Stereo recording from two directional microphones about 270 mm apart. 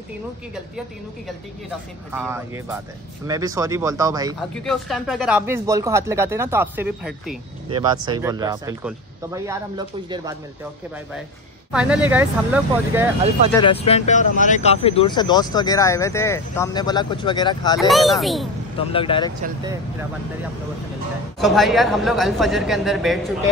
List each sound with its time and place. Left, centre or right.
2.1 s speech: centre
4.4 s speech: centre
7.7 s speech: centre
11.7 s speech: centre
13.5 s speech: centre
17.7 s speech: centre
18.9 s speech: centre
19.6 s speech: centre
21.4 s speech: centre